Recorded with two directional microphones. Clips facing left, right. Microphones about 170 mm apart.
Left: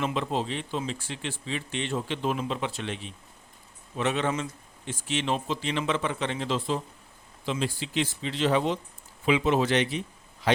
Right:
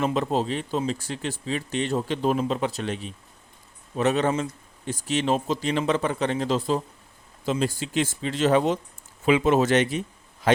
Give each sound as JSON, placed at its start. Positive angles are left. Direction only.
{"t": 0.0, "sound": "a man's voice", "side_deg": -40}